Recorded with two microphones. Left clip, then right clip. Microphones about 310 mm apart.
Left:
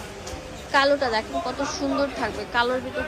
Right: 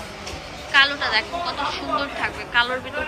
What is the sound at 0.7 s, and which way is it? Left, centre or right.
A woman's voice, centre.